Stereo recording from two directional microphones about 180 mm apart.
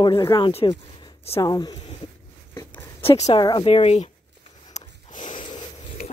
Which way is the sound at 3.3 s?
25° left (ahead or behind).